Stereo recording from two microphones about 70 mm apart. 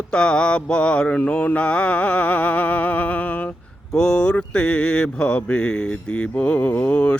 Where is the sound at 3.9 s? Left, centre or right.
Centre.